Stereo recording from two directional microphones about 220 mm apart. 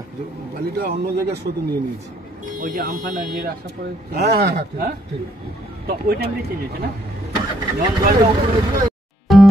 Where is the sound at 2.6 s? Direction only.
40° right (ahead or behind).